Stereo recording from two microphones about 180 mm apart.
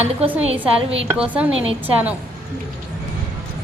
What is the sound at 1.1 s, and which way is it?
Speech, 10° right (ahead or behind).